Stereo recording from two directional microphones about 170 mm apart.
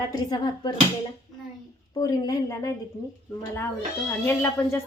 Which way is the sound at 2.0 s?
20° left (ahead or behind).